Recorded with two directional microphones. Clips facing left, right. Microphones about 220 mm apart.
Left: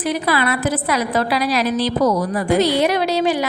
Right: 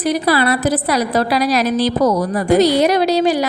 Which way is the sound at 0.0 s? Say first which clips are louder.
Right 4 dB; 40° right (ahead or behind).